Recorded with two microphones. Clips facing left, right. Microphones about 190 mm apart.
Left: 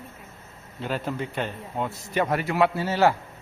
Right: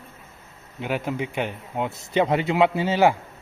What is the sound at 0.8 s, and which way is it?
A man's voice, 15° right (ahead or behind).